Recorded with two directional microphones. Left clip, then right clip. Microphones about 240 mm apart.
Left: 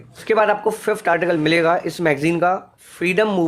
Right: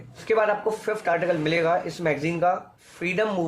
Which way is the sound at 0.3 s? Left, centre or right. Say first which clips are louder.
Left 5 dB; left.